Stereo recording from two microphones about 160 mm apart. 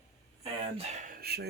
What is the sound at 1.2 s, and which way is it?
Dishes, 80° right.